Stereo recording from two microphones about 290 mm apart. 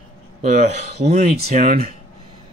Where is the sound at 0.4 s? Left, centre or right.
Right.